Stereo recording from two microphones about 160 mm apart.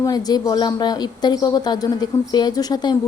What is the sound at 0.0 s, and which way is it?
A woman's voice, 25° left (ahead or behind).